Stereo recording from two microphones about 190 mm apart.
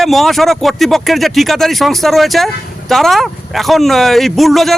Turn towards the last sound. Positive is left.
turn(degrees=0)  # may be behind; listen again after turning